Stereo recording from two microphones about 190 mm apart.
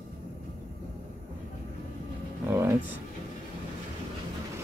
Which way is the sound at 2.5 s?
10° right (ahead or behind).